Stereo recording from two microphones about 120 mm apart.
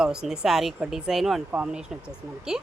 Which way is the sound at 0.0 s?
5° right (ahead or behind).